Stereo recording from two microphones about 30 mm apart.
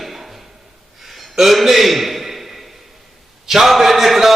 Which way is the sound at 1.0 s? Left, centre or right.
Centre.